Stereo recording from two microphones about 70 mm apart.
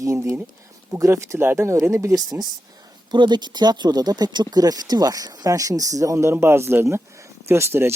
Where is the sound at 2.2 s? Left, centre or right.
Right.